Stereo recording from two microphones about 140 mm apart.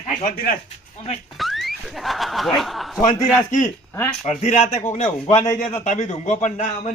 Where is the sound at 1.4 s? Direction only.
Centre (ahead or behind).